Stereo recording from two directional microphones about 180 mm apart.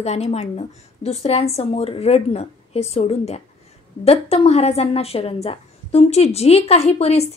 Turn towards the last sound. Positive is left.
turn(degrees=35)  # may be behind; listen again after turning